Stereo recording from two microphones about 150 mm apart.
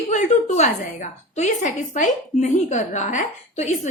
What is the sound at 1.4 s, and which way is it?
A woman's voice, 55° left (ahead or behind).